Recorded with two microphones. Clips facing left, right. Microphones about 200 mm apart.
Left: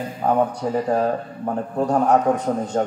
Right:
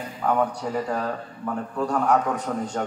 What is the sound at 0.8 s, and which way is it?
A man's voice, 40° left (ahead or behind).